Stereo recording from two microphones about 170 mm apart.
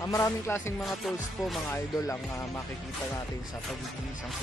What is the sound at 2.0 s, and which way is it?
Music, 15° left (ahead or behind).